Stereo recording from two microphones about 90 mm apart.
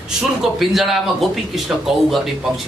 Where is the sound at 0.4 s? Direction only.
5° right (ahead or behind).